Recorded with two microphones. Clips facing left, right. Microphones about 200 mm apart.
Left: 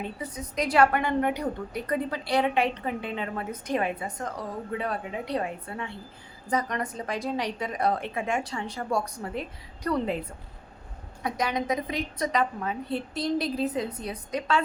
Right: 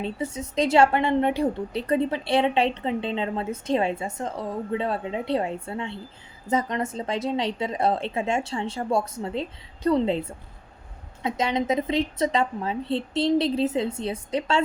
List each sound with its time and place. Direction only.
0.0 s a woman's voice: 25° right (ahead or behind)